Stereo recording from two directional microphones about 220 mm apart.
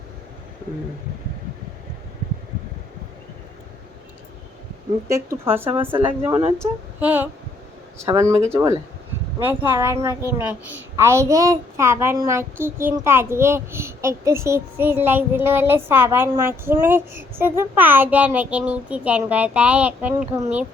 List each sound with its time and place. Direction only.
5.0 s a woman's voice: 15° right (ahead or behind)
9.4 s a woman's voice: 10° right (ahead or behind)